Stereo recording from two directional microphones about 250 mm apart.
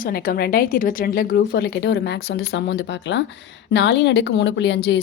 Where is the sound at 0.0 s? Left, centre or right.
Left.